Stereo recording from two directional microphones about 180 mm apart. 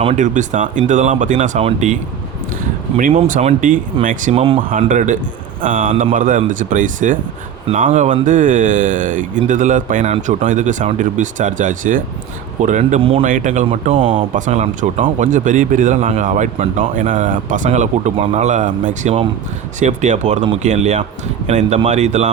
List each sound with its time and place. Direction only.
0.0 s speech: 40° right (ahead or behind)
3.0 s speech: 40° right (ahead or behind)
4.8 s speech: 45° right (ahead or behind)
14.3 s speech: 40° right (ahead or behind)